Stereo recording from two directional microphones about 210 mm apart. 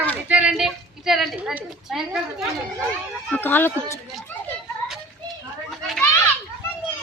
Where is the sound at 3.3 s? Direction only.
10° left (ahead or behind).